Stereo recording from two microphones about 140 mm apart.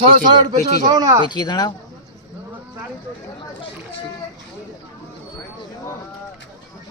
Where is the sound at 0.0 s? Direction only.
30° right (ahead or behind).